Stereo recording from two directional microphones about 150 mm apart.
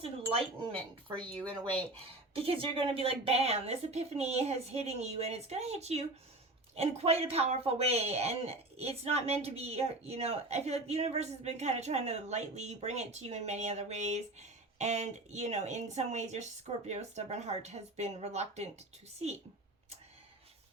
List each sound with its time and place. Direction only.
0.0 s speech: 40° right (ahead or behind)
1.1 s speech: 10° left (ahead or behind)
2.3 s speech: 40° right (ahead or behind)